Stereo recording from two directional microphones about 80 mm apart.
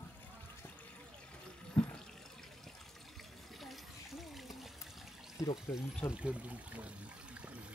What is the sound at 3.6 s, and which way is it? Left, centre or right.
Splash, centre.